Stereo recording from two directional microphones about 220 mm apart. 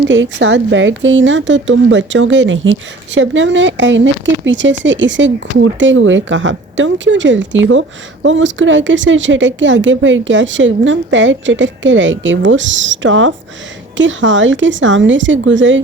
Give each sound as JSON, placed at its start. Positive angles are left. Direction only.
{"t": 0.1, "sound": "speech", "side_deg": -60}